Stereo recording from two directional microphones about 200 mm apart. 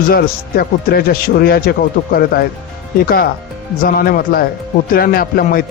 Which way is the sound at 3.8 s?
45° left (ahead or behind).